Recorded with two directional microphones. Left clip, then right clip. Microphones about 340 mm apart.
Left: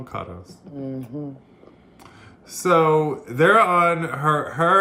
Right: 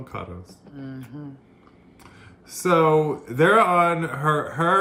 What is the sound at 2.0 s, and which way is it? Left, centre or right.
Speech, centre.